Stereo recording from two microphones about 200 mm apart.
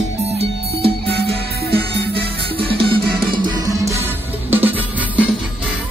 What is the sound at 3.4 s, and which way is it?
Music, 15° right (ahead or behind).